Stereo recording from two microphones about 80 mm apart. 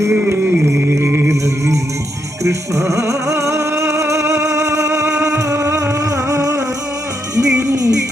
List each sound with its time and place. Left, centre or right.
0.1 s music: right
5.0 s music: centre
5.4 s music: right